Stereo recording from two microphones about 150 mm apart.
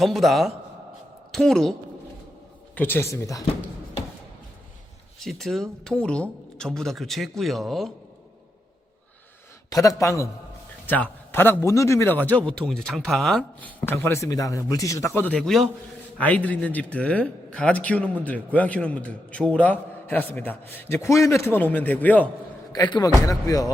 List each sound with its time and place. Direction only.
0.0 s a man's voice: centre (ahead or behind)
2.7 s speech: 15° left (ahead or behind)
5.2 s a man's voice: centre (ahead or behind)
9.6 s a man's voice: 25° left (ahead or behind)
22.7 s speech: 30° left (ahead or behind)